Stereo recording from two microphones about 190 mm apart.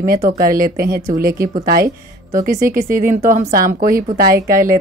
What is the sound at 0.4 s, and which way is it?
A woman's voice, 50° right (ahead or behind).